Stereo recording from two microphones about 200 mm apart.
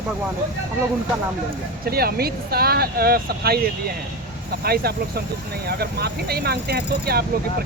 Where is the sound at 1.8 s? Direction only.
50° right (ahead or behind).